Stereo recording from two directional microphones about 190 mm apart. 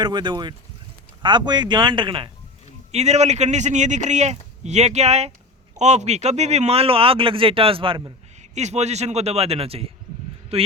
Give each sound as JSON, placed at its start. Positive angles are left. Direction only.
{"t": 0.0, "sound": "a man's voice", "side_deg": -25}
{"t": 8.4, "sound": "a man's voice", "side_deg": -35}